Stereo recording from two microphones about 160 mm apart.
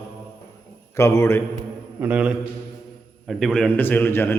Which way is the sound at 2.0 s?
10° right (ahead or behind).